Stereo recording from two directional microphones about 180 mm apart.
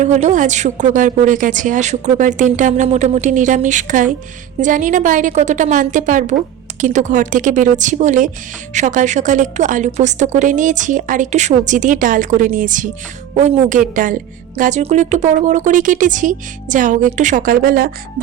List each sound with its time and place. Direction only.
0.0 s a woman's voice: 40° right (ahead or behind)